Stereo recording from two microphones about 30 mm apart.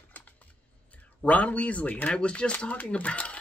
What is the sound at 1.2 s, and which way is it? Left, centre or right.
Speech, left.